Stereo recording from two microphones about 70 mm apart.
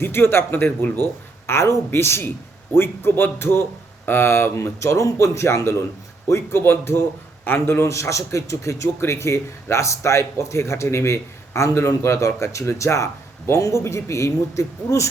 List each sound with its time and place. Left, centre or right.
0.0 s speech: left
1.5 s a man's voice: left